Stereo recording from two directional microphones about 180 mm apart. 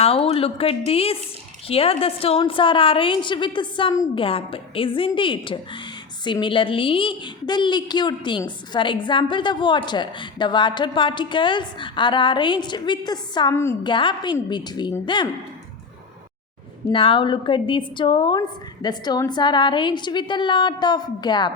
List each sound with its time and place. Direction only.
0.0 s a woman's voice: 35° left (ahead or behind); by 13.7 s 15° left (ahead or behind)
13.8 s a woman's voice: 25° left (ahead or behind)
16.9 s a woman's voice: 30° left (ahead or behind)